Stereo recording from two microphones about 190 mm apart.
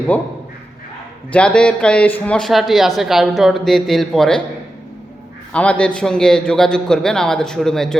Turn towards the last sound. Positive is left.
turn(degrees=0)  # may be behind; listen again after turning